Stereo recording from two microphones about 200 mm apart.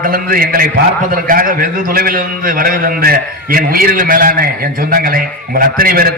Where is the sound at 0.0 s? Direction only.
45° right (ahead or behind).